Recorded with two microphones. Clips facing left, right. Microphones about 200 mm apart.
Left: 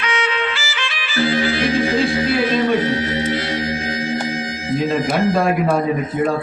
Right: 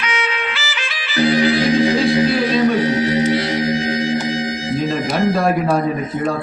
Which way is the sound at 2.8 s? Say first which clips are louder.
Right 4 dB; 15° right (ahead or behind).